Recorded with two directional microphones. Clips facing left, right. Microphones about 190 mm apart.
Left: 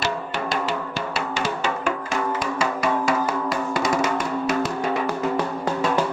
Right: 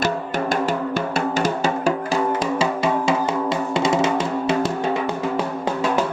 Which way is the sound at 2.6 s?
25° right (ahead or behind).